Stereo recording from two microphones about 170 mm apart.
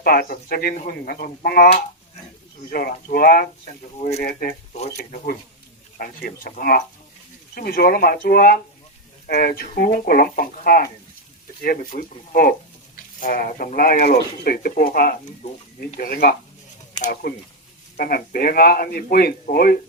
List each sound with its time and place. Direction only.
0.0 s speech: 60° left (ahead or behind)
4.9 s speech: 55° left (ahead or behind)